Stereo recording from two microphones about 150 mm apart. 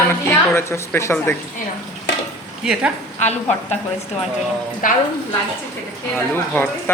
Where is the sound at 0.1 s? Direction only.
15° left (ahead or behind).